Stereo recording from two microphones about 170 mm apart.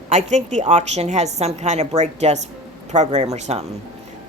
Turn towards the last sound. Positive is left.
turn(degrees=-40)  # may be behind; listen again after turning